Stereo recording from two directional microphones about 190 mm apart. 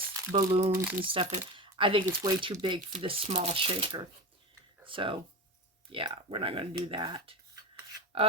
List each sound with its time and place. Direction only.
0.1 s crumpling: 15° right (ahead or behind)
0.7 s speech: 10° right (ahead or behind)
1.0 s speech: 30° right (ahead or behind)